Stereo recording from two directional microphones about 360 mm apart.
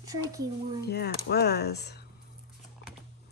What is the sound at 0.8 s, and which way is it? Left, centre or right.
Speech, left.